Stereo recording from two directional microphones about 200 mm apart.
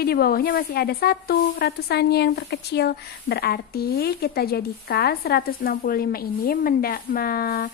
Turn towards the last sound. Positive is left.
turn(degrees=50)  # may be behind; listen again after turning